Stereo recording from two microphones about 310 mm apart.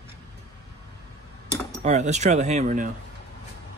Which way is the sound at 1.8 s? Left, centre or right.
Right.